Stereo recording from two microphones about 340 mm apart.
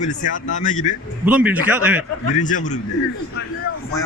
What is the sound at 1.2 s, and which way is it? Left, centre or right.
Speech, centre.